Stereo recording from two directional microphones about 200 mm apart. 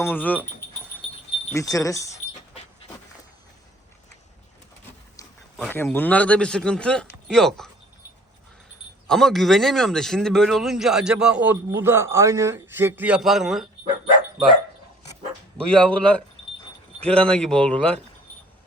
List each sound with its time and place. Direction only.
0.0 s speech: 10° left (ahead or behind)
1.5 s speech: 15° left (ahead or behind)
5.5 s speech: 10° left (ahead or behind)
9.0 s speech: centre (ahead or behind)
15.7 s speech: 5° left (ahead or behind)